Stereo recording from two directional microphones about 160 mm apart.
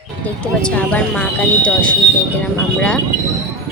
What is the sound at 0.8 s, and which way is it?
Speech, 10° left (ahead or behind).